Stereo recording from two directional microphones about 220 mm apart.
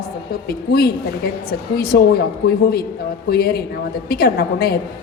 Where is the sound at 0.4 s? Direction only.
45° left (ahead or behind).